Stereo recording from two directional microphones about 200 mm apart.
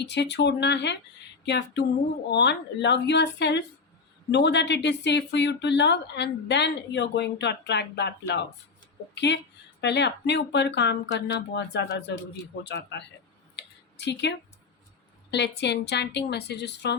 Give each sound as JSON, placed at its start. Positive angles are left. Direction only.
{"t": 0.0, "sound": "speech", "side_deg": 60}
{"t": 9.1, "sound": "speech", "side_deg": 60}
{"t": 13.6, "sound": "a sound", "side_deg": 60}
{"t": 15.3, "sound": "speech", "side_deg": 60}